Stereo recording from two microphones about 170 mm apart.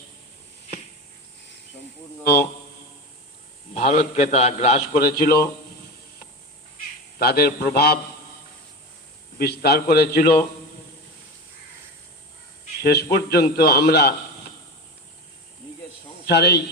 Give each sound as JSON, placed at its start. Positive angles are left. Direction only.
{"t": 2.2, "sound": "a man's voice", "side_deg": 70}
{"t": 3.8, "sound": "a man's voice", "side_deg": 40}
{"t": 4.9, "sound": "a man's voice", "side_deg": 65}
{"t": 7.2, "sound": "a man's voice", "side_deg": 65}
{"t": 9.4, "sound": "a man's voice", "side_deg": 70}
{"t": 12.8, "sound": "a man's voice", "side_deg": 70}
{"t": 16.2, "sound": "speech", "side_deg": 75}